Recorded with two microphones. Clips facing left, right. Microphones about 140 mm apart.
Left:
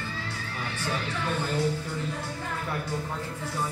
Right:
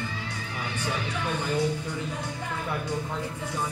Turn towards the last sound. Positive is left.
turn(degrees=-15)  # may be behind; listen again after turning